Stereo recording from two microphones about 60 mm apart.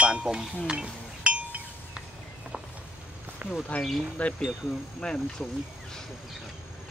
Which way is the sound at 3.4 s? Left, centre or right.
Right.